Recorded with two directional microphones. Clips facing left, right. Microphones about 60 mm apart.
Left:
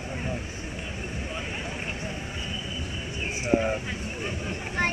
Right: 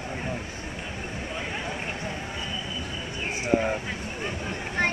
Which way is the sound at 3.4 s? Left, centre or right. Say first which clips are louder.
Even; right.